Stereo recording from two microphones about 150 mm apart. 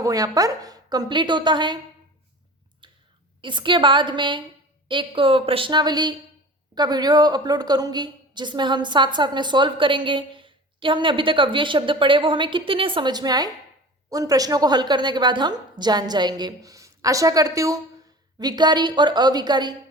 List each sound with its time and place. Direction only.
0.0 s a woman's voice: 25° right (ahead or behind)
2.8 s clicking: 35° right (ahead or behind)
3.4 s a woman's voice: 30° right (ahead or behind)